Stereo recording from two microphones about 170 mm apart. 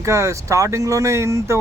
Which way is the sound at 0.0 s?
15° right (ahead or behind).